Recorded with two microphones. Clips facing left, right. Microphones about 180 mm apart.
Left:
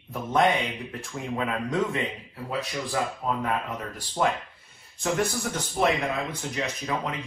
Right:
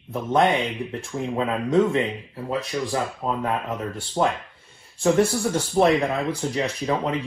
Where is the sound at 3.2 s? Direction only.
25° right (ahead or behind).